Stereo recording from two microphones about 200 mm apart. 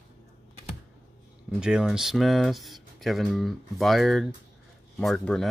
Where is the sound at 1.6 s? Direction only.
5° right (ahead or behind).